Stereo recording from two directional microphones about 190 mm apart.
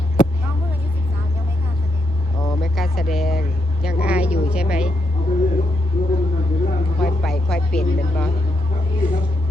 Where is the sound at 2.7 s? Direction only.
Centre (ahead or behind).